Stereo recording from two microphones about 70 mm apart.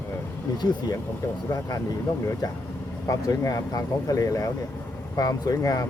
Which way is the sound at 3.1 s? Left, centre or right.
Left.